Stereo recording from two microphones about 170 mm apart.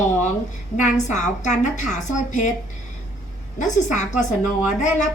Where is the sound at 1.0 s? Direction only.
45° left (ahead or behind).